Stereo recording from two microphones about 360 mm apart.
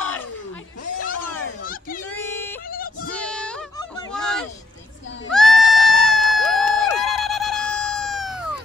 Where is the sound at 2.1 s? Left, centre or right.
Centre.